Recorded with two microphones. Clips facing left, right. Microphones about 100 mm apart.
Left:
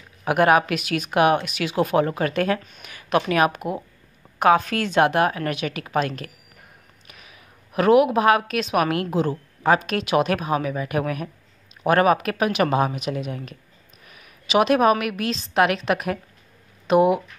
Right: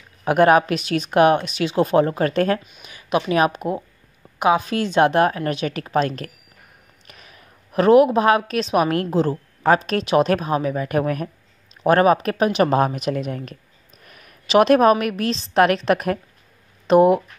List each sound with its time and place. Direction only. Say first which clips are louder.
0.2 s speech: right 3 dB; 30° right (ahead or behind)
2.8 s a woman's voice: even; 20° right (ahead or behind); by 6.3 s 35° right (ahead or behind)
7.1 s a sound: right 2 dB; 45° right (ahead or behind)
7.8 s a woman's voice: right 3 dB; 30° right (ahead or behind)
12.7 s a woman's voice: right 3 dB; 45° right (ahead or behind)